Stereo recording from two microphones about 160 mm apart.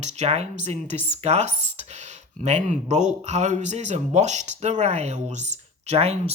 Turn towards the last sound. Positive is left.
turn(degrees=-40)  # may be behind; listen again after turning